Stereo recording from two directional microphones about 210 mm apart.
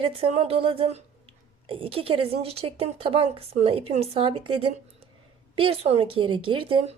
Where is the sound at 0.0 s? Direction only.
25° right (ahead or behind).